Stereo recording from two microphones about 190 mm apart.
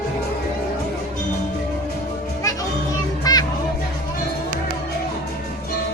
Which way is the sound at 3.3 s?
20° left (ahead or behind).